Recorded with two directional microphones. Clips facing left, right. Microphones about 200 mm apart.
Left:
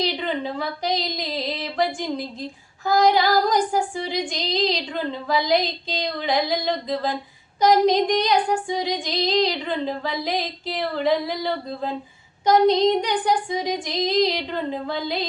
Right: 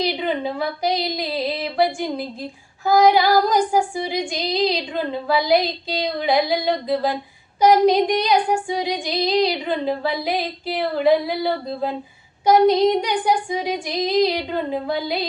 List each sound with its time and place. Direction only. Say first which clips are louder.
0.0 s female singing: right 3 dB; 10° right (ahead or behind)